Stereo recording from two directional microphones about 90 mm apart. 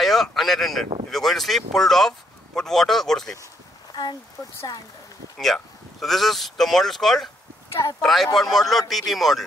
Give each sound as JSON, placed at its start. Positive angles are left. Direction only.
{"t": 0.0, "sound": "speech", "side_deg": 0}
{"t": 3.9, "sound": "speech", "side_deg": 50}
{"t": 5.4, "sound": "speech", "side_deg": 0}